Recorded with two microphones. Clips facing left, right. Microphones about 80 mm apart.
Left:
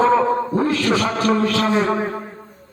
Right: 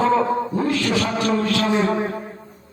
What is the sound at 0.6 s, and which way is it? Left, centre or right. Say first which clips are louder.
A man's voice: left 2 dB; left.